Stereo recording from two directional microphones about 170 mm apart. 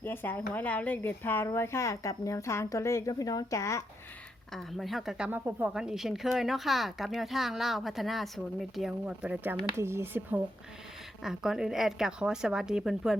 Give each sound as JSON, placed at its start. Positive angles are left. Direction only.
{"t": 0.0, "sound": "a woman's voice", "side_deg": 10}
{"t": 4.5, "sound": "speech", "side_deg": 0}